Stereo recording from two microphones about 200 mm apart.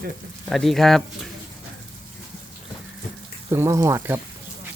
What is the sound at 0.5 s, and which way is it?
Speech, centre (ahead or behind).